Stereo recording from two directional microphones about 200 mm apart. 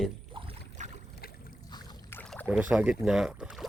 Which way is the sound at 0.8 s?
35° right (ahead or behind).